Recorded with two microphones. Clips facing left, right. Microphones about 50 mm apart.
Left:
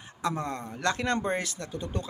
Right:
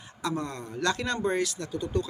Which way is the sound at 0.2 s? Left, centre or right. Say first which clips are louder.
Left 1 dB; left.